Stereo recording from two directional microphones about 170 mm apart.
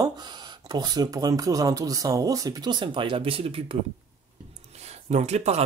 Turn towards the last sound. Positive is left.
turn(degrees=-40)  # may be behind; listen again after turning